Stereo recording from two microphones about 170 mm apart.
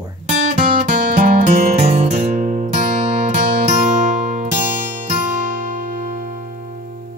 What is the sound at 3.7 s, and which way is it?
Music, 50° right (ahead or behind).